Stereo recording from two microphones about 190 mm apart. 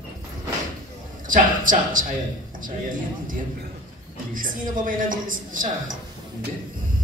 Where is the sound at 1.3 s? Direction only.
45° right (ahead or behind).